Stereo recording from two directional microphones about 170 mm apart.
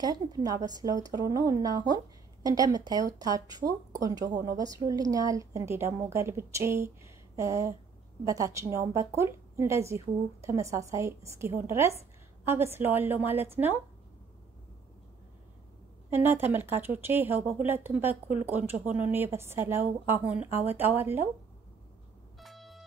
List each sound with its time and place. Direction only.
0.0 s a woman's voice: 25° right (ahead or behind)
16.1 s a woman's voice: 10° right (ahead or behind)
22.4 s a sound: centre (ahead or behind)